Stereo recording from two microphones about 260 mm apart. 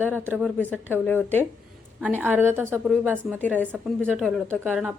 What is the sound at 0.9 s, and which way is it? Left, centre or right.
Speech, centre.